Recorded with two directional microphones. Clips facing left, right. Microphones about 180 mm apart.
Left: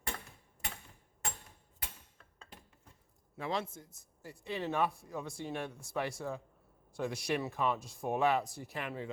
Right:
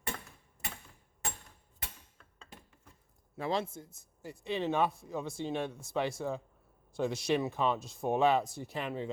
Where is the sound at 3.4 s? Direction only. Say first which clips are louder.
Right 3 dB; 30° right (ahead or behind).